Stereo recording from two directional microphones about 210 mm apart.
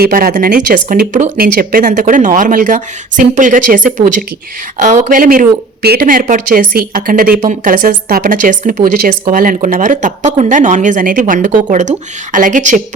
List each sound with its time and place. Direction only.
0.0 s speech: 45° right (ahead or behind)